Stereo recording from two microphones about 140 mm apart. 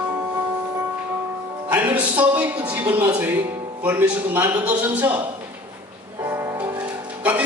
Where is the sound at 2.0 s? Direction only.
10° right (ahead or behind).